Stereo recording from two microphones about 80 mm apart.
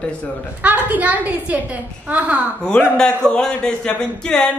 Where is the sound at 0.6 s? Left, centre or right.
Right.